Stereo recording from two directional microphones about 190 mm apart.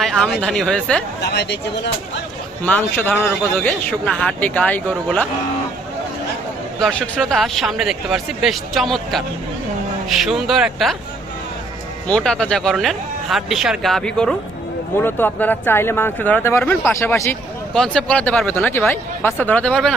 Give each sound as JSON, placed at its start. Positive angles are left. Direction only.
{"t": 0.0, "sound": "speech", "side_deg": 0}
{"t": 1.2, "sound": "speech", "side_deg": 60}
{"t": 2.6, "sound": "speech", "side_deg": 10}
{"t": 6.8, "sound": "speech", "side_deg": 0}
{"t": 12.0, "sound": "speech", "side_deg": 5}